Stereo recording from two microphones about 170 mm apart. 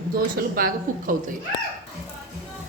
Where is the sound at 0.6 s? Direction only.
55° right (ahead or behind).